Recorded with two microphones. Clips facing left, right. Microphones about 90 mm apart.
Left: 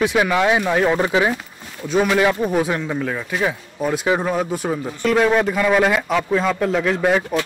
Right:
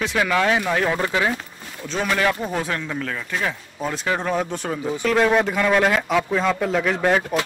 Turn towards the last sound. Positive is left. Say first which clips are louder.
# left 2 dB
turn(degrees=0)  # may be behind; listen again after turning